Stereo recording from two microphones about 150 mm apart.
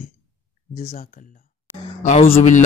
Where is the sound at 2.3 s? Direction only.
50° left (ahead or behind).